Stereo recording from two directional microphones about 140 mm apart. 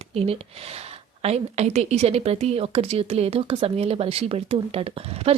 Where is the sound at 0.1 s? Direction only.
45° right (ahead or behind).